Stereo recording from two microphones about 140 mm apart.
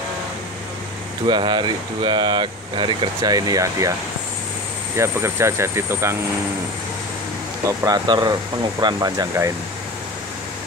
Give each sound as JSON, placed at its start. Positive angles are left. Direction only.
{"t": 1.2, "sound": "speech", "side_deg": -35}
{"t": 4.9, "sound": "speech", "side_deg": -20}
{"t": 7.6, "sound": "speech", "side_deg": -25}